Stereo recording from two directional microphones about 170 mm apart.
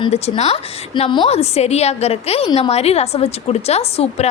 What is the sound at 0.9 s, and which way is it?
A woman's voice, 25° left (ahead or behind).